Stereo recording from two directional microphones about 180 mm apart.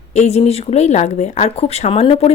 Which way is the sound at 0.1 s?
40° left (ahead or behind).